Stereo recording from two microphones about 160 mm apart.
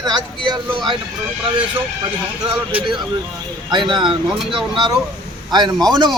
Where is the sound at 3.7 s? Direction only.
30° right (ahead or behind).